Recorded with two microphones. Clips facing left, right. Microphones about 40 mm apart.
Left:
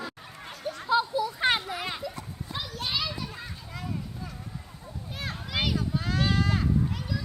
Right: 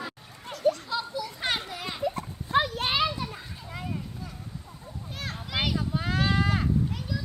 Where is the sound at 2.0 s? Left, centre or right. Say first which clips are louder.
Right 6 dB; right.